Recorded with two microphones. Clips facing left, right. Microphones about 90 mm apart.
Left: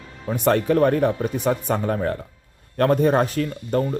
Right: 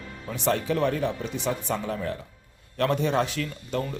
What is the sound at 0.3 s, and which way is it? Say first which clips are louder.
Speech: left 7 dB; 50° left (ahead or behind).